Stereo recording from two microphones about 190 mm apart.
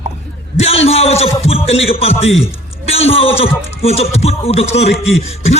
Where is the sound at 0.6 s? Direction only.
30° left (ahead or behind).